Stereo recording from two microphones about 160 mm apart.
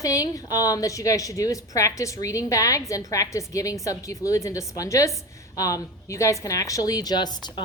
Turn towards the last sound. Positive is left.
turn(degrees=25)  # may be behind; listen again after turning